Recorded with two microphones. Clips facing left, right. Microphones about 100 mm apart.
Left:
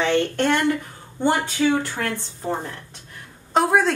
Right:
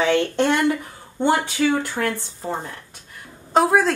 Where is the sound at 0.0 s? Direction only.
10° right (ahead or behind).